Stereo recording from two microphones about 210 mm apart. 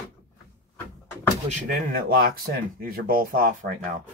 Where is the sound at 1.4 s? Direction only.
45° right (ahead or behind).